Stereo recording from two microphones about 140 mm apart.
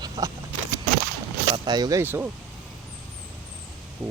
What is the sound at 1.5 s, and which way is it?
Speech, 30° right (ahead or behind).